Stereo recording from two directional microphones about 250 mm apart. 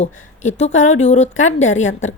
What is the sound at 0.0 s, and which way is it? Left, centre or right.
A woman's voice, left.